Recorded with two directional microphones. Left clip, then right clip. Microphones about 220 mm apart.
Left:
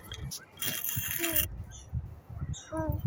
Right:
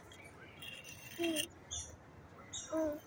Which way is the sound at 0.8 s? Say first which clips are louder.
Left 5 dB; 50° left (ahead or behind).